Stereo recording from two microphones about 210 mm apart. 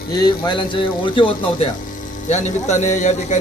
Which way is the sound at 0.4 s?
20° left (ahead or behind).